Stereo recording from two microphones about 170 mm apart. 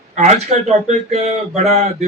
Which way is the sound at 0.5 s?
40° right (ahead or behind).